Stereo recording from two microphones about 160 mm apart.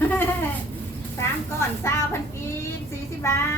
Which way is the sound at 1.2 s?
15° left (ahead or behind).